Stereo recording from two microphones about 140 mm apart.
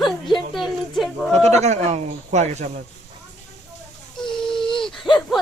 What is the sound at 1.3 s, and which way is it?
Speech, 50° right (ahead or behind).